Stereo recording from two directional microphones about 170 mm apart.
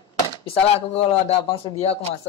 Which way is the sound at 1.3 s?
35° left (ahead or behind).